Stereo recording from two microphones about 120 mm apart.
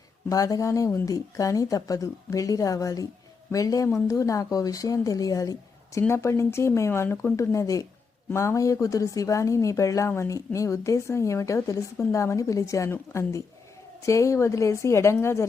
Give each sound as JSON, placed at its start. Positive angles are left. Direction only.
{"t": 0.3, "sound": "a woman's voice", "side_deg": 30}